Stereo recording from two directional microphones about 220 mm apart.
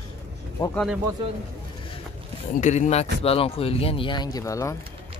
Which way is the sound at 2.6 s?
30° left (ahead or behind).